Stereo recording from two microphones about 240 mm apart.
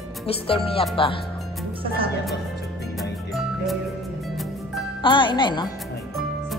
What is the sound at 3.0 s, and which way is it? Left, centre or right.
Music, centre.